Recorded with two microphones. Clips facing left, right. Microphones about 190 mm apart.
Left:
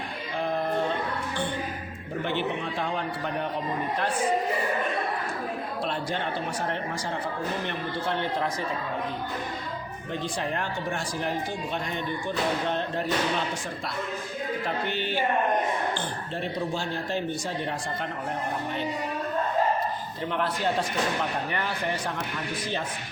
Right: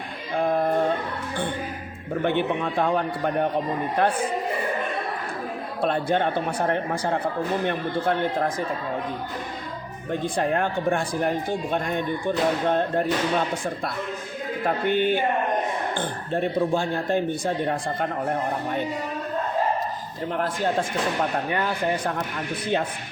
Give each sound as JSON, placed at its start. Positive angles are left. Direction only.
{"t": 0.3, "sound": "music", "side_deg": -50}
{"t": 2.2, "sound": "speech", "side_deg": -55}
{"t": 5.8, "sound": "speech", "side_deg": -55}
{"t": 10.1, "sound": "speech", "side_deg": -55}
{"t": 14.6, "sound": "speech", "side_deg": -50}
{"t": 20.3, "sound": "speech", "side_deg": -45}